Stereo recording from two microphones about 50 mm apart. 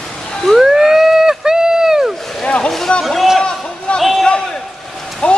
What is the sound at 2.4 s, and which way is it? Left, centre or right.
Boat, centre.